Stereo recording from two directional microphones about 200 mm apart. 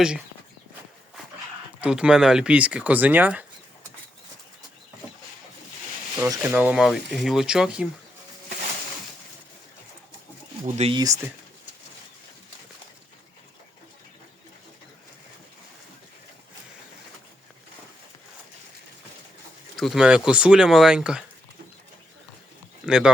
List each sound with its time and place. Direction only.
1.8 s speech: 5° right (ahead or behind)
6.2 s speech: 10° right (ahead or behind)
10.8 s speech: 30° right (ahead or behind)
19.7 s speech: centre (ahead or behind)
22.9 s speech: 5° right (ahead or behind)